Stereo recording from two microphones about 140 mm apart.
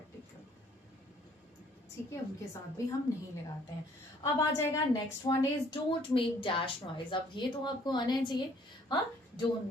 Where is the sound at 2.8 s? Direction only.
20° left (ahead or behind).